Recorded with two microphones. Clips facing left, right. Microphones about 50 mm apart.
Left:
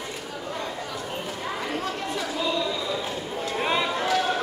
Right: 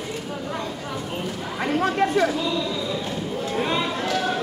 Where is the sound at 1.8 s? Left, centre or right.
Right.